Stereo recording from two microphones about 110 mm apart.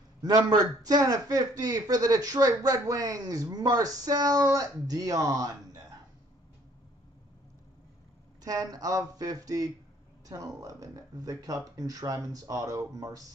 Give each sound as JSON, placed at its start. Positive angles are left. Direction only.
{"t": 0.5, "sound": "speech", "side_deg": -35}
{"t": 8.5, "sound": "speech", "side_deg": -35}